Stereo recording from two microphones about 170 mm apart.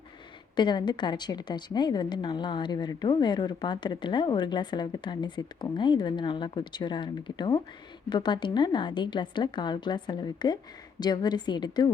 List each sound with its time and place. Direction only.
0.5 s a woman's voice: 25° left (ahead or behind)